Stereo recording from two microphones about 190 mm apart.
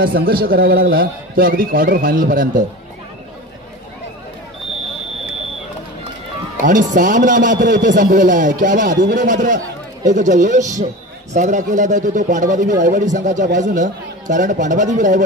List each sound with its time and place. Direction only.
0.0 s speech: 50° right (ahead or behind)
6.6 s speech: 40° right (ahead or behind)